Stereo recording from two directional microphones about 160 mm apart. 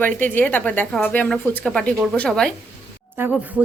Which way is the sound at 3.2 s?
15° right (ahead or behind).